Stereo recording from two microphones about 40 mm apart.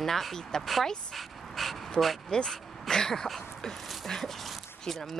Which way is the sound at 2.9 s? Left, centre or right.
Centre.